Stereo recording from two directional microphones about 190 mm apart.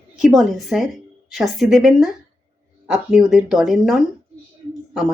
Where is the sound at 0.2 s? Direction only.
Centre (ahead or behind).